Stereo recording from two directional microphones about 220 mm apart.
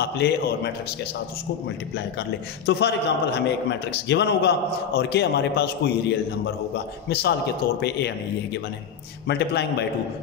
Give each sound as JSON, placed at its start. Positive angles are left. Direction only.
{"t": 0.0, "sound": "a man's voice", "side_deg": 50}
{"t": 2.6, "sound": "a man's voice", "side_deg": 50}
{"t": 9.3, "sound": "a man's voice", "side_deg": 50}